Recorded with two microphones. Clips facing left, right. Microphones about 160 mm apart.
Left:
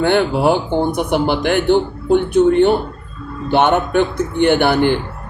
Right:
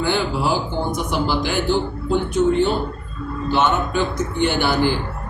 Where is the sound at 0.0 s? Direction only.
60° left (ahead or behind).